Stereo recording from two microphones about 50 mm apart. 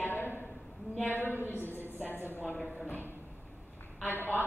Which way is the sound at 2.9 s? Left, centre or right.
Left.